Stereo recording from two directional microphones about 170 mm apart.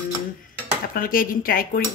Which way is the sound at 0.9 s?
55° left (ahead or behind).